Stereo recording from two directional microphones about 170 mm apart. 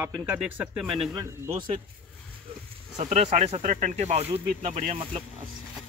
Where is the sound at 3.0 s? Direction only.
40° right (ahead or behind).